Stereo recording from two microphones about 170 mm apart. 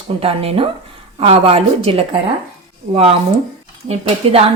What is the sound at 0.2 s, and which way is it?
A woman's voice, 35° right (ahead or behind).